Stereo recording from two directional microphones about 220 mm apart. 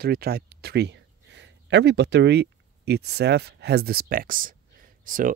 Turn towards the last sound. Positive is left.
turn(degrees=-35)  # may be behind; listen again after turning